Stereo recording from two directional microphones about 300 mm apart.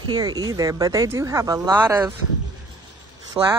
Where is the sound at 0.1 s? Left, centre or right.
Centre.